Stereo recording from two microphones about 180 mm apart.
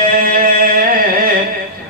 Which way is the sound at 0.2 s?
50° right (ahead or behind).